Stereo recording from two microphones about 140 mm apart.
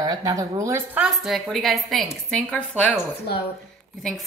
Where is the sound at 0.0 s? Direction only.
30° right (ahead or behind).